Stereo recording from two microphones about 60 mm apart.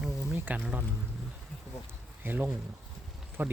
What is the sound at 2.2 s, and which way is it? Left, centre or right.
Speech, right.